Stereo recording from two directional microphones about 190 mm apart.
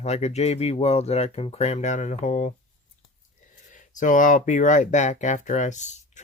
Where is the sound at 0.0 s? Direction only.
35° left (ahead or behind).